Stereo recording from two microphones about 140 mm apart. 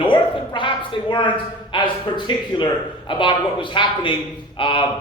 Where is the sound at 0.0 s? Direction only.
35° left (ahead or behind).